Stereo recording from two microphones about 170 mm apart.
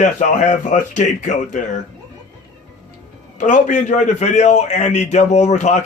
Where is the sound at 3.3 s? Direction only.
45° left (ahead or behind).